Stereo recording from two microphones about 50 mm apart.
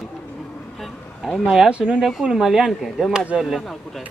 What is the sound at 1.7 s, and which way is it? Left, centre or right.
Speech, centre.